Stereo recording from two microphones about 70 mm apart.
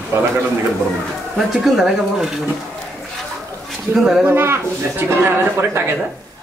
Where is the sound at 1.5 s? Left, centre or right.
Centre.